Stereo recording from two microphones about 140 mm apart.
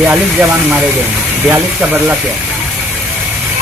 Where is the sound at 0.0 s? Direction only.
15° right (ahead or behind).